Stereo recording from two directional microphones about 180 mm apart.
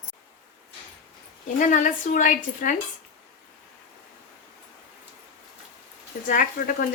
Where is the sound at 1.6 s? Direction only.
45° left (ahead or behind).